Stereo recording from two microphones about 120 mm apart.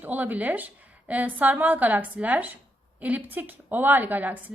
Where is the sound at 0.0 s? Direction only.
15° right (ahead or behind).